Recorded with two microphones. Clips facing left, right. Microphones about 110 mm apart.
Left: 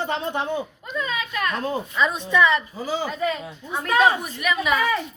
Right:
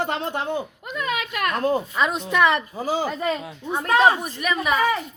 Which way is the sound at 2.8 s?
45° right (ahead or behind).